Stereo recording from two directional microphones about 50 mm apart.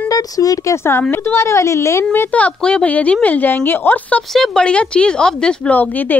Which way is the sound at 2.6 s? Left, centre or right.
Left.